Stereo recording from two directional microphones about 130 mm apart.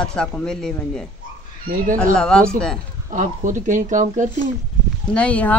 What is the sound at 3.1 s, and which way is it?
Speech, 80° right.